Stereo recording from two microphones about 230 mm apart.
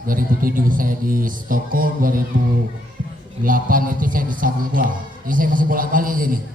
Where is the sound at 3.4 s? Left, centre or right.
Right.